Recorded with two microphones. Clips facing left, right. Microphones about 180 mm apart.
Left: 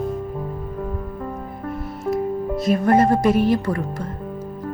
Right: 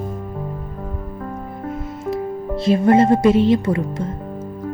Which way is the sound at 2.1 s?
30° right (ahead or behind).